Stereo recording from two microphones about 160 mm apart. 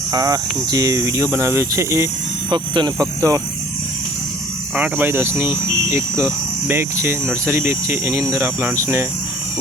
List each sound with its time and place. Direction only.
0.1 s speech: 25° right (ahead or behind)
4.7 s speech: 10° right (ahead or behind)